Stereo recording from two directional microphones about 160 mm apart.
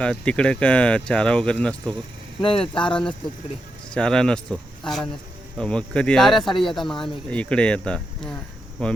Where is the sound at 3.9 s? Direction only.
5° left (ahead or behind).